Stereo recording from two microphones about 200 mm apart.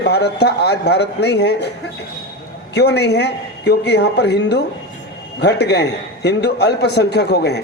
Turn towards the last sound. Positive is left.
turn(degrees=55)  # may be behind; listen again after turning